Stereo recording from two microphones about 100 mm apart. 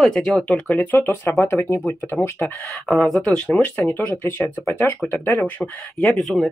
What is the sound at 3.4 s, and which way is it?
Speech, 15° left (ahead or behind).